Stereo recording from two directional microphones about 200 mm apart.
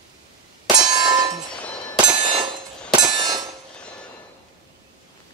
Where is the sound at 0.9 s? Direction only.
20° right (ahead or behind).